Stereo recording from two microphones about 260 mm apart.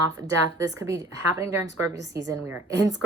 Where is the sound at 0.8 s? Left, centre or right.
Centre.